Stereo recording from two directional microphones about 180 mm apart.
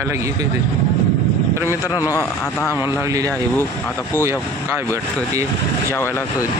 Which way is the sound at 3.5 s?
10° left (ahead or behind).